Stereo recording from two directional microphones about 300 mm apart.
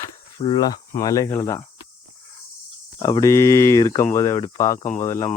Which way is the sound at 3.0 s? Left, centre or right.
Centre.